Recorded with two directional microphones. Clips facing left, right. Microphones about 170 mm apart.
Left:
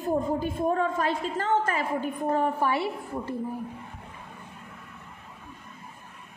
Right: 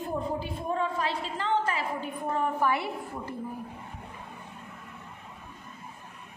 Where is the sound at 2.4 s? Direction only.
25° left (ahead or behind).